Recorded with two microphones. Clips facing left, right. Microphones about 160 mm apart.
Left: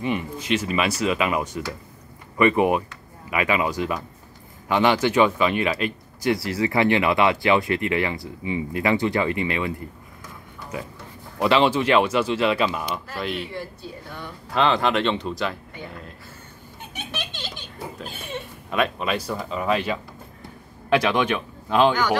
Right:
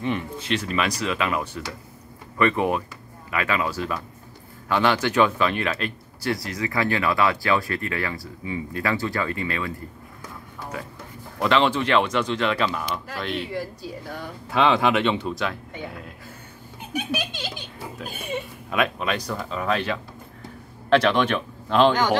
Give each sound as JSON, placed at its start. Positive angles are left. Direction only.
{"t": 0.5, "sound": "speech", "side_deg": 10}
{"t": 6.3, "sound": "speech", "side_deg": 30}
{"t": 11.3, "sound": "speech", "side_deg": 10}
{"t": 14.5, "sound": "speech", "side_deg": -5}
{"t": 16.9, "sound": "speech", "side_deg": -10}
{"t": 18.7, "sound": "speech", "side_deg": 0}
{"t": 21.9, "sound": "speech", "side_deg": -30}